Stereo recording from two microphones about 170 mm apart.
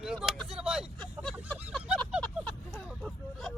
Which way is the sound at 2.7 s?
Centre (ahead or behind).